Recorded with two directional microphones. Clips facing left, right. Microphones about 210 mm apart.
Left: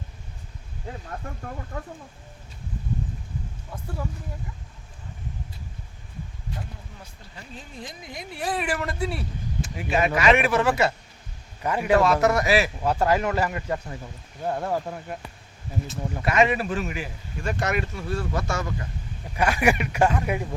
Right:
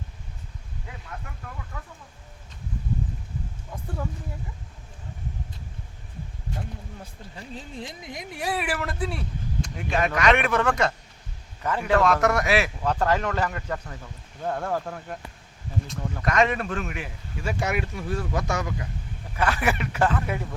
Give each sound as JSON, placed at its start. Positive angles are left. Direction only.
{"t": 0.9, "sound": "speech", "side_deg": 40}
{"t": 7.8, "sound": "a man's voice", "side_deg": -20}
{"t": 16.2, "sound": "speech", "side_deg": 5}
{"t": 19.4, "sound": "a man's voice", "side_deg": 15}